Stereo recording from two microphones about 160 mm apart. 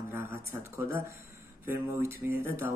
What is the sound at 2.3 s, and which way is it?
Speech, 15° right (ahead or behind).